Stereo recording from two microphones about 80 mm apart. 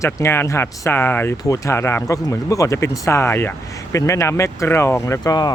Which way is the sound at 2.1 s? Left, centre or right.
Left.